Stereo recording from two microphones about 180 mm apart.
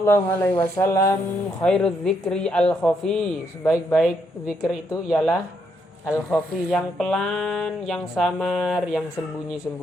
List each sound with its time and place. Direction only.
0.0 s speech: 10° left (ahead or behind)
1.6 s speech: 5° left (ahead or behind)
3.9 s speech: 5° right (ahead or behind)